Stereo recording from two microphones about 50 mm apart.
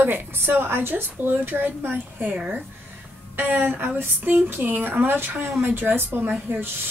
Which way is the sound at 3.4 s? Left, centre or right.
Right.